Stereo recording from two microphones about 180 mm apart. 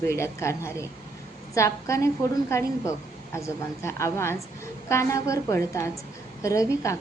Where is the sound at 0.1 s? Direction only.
15° left (ahead or behind).